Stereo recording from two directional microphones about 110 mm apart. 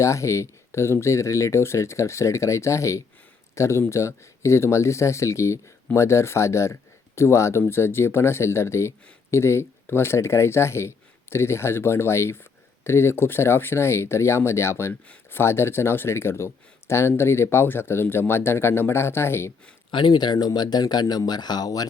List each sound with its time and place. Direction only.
0.0 s speech: 25° left (ahead or behind)
19.9 s speech: 45° left (ahead or behind)